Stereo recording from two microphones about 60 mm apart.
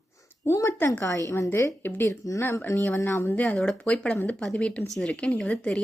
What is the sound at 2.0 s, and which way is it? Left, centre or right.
Speech, left.